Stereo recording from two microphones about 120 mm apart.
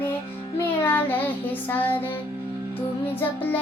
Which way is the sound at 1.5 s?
15° left (ahead or behind).